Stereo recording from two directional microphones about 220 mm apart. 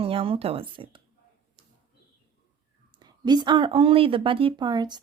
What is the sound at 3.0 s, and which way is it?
Speech, 20° right (ahead or behind).